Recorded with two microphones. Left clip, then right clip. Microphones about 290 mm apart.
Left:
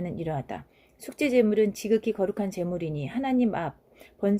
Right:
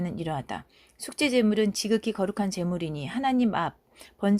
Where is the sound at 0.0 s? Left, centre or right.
Right.